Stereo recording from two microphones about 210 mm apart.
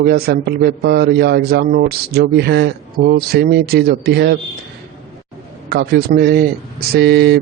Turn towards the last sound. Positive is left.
turn(degrees=-50)  # may be behind; listen again after turning